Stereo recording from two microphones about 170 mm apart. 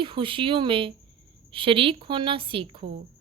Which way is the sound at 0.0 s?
30° right (ahead or behind).